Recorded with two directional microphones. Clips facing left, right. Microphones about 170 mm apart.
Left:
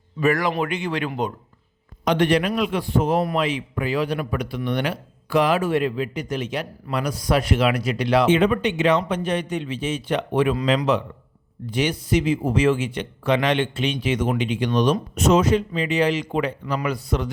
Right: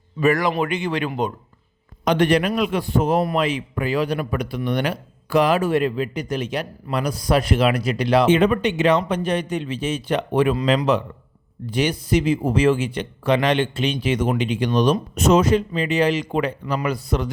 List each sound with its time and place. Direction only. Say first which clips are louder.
0.2 s speech: right 2 dB; 20° right (ahead or behind)
2.0 s a man's voice: right 1 dB; 45° right (ahead or behind)
11.7 s speech: right 1 dB; 35° right (ahead or behind)